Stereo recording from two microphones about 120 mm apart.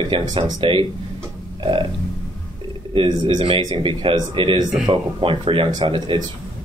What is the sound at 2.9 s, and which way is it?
Speech, 45° right (ahead or behind).